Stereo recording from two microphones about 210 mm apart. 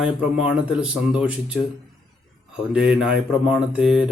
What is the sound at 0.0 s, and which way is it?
Speech, 5° right (ahead or behind).